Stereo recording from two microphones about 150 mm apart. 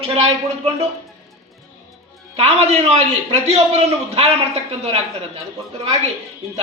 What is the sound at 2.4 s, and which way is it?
A woman's voice, 45° right (ahead or behind).